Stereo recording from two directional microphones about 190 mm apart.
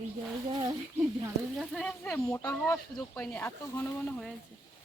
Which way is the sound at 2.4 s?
15° left (ahead or behind).